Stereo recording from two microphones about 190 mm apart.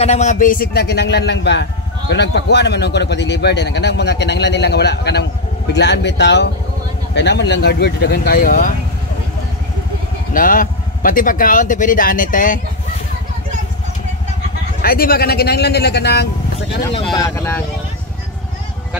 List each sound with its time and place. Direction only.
0.0 s speech: 35° left (ahead or behind); by 8.7 s 50° left (ahead or behind)
10.3 s speech: 45° left (ahead or behind)
14.8 s speech: 55° left (ahead or behind)
17.1 s speech: 15° left (ahead or behind)